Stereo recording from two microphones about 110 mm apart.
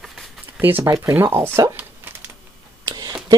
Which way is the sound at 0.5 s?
15° right (ahead or behind).